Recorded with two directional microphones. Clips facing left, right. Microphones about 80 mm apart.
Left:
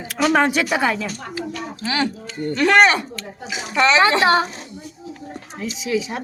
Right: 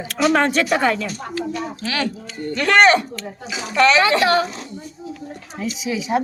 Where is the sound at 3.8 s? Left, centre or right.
Left.